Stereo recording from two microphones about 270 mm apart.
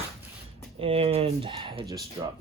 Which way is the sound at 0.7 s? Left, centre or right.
Right.